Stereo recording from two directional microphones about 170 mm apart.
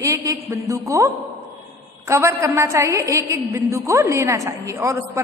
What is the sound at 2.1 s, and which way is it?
A woman's voice, 15° right (ahead or behind).